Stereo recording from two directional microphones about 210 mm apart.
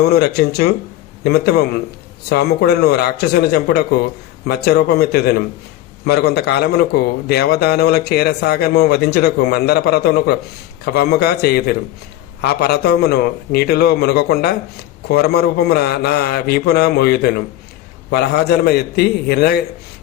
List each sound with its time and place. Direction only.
0.0 s a man's voice: 50° left (ahead or behind)